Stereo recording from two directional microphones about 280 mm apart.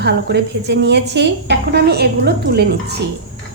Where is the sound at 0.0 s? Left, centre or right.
Right.